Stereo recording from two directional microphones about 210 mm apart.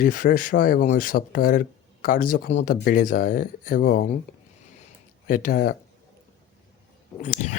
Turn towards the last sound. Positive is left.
turn(degrees=35)  # may be behind; listen again after turning